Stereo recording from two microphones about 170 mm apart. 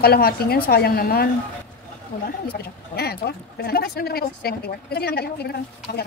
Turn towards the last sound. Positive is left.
turn(degrees=65)  # may be behind; listen again after turning